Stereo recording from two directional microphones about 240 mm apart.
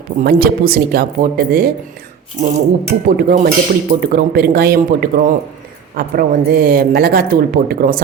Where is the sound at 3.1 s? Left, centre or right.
Right.